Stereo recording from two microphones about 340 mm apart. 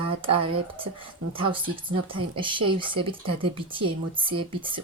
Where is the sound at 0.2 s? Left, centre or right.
Centre.